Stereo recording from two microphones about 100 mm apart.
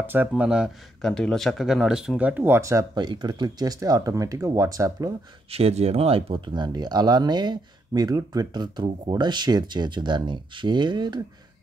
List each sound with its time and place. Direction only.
0.0 s speech: 20° right (ahead or behind)
0.3 s speech: 10° right (ahead or behind)
1.0 s speech: 5° left (ahead or behind); by 2.9 s 30° right (ahead or behind)
2.9 s speech: 45° right (ahead or behind)
5.5 s speech: 85° right; by 11.2 s 45° right (ahead or behind)